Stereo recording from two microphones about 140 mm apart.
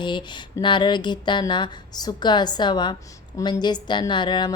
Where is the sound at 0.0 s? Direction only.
35° left (ahead or behind).